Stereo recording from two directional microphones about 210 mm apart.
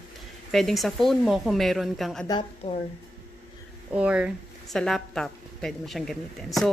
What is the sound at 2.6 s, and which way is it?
Speech, 30° left (ahead or behind).